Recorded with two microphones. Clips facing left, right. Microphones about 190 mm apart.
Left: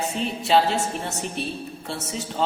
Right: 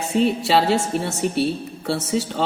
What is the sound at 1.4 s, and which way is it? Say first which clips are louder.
Speech: right 8 dB; 75° right (ahead or behind).